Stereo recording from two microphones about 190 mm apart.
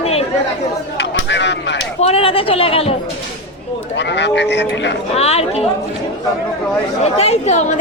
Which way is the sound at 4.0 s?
65° left (ahead or behind).